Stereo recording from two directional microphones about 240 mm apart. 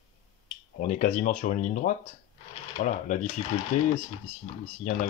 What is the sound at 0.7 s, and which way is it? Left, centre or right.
Speech, left.